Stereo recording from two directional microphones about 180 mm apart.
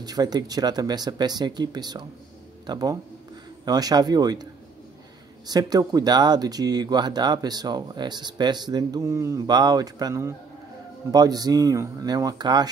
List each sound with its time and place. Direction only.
0.0 s speech: 20° right (ahead or behind)
5.5 s speech: 20° right (ahead or behind)